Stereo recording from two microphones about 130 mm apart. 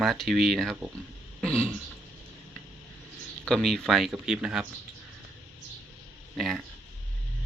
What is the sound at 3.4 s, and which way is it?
Speech, 5° left (ahead or behind).